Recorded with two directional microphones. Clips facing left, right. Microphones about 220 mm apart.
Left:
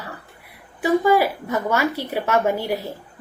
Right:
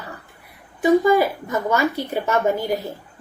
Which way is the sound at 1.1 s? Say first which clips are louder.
Even; 10° left (ahead or behind).